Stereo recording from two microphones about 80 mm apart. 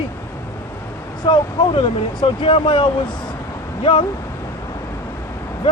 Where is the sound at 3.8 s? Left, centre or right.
Left.